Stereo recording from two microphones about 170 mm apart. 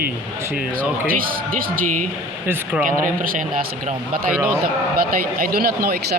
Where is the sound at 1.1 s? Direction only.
55° right (ahead or behind).